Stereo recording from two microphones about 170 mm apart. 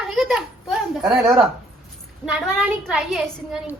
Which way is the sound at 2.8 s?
Centre (ahead or behind).